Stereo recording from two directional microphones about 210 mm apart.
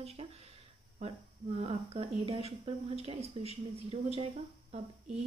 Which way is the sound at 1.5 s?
30° right (ahead or behind).